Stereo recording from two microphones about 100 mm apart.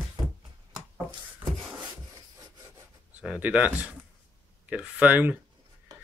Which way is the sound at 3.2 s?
15° right (ahead or behind).